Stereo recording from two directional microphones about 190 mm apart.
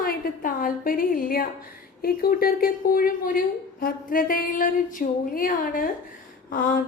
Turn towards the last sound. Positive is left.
turn(degrees=50)  # may be behind; listen again after turning